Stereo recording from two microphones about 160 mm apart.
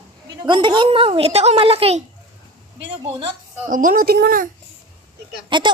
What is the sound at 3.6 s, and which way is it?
Speech, 55° right (ahead or behind).